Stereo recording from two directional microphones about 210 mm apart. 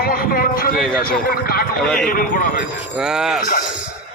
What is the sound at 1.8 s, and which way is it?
Speech, 5° left (ahead or behind).